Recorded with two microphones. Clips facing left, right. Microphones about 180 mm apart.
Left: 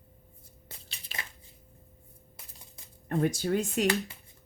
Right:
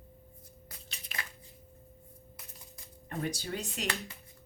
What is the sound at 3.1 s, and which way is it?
Speech, 50° left (ahead or behind).